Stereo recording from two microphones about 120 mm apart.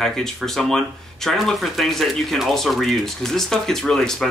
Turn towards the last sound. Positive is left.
turn(degrees=5)  # may be behind; listen again after turning